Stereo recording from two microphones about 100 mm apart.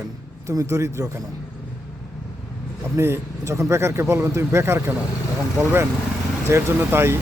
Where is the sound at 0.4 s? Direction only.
30° right (ahead or behind).